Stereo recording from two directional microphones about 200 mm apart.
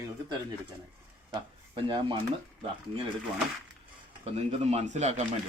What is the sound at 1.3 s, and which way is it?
Speech, 25° right (ahead or behind).